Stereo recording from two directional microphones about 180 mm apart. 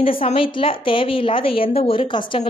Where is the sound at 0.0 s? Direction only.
30° left (ahead or behind).